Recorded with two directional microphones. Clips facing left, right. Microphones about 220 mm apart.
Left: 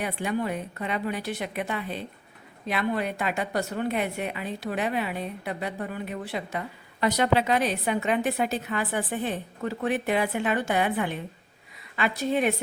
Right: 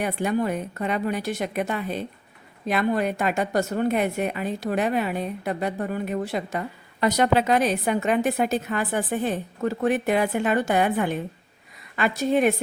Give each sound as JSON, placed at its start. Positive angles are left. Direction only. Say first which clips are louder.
{"t": 0.0, "sound": "a woman's voice", "louder": "right 4 dB", "side_deg": -45}